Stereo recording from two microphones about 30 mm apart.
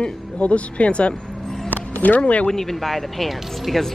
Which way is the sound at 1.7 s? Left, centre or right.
Left.